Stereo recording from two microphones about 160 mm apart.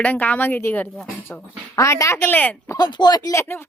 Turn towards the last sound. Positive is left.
turn(degrees=15)  # may be behind; listen again after turning